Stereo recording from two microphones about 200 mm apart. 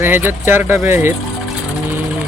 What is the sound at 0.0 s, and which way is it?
Speech, 10° right (ahead or behind).